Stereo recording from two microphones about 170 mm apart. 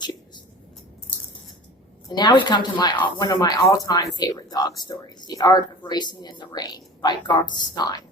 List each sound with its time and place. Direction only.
2.0 s speech: 25° left (ahead or behind)